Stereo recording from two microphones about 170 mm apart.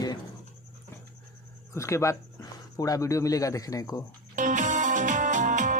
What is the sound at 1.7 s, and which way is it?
Speech, 15° left (ahead or behind).